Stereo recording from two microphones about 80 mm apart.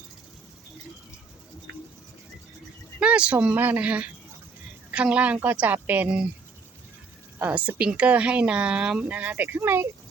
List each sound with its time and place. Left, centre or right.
3.0 s speech: centre
7.3 s speech: right